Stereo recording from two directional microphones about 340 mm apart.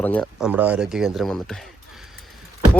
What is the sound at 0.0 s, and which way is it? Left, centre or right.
Speech, centre.